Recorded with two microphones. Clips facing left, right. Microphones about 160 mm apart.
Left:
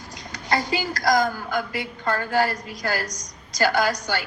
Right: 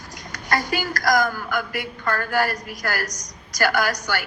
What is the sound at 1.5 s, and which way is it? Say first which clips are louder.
A woman's voice: even; 25° left (ahead or behind).